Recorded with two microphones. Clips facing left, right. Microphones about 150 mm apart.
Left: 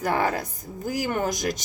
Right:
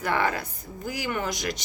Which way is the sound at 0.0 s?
40° left (ahead or behind).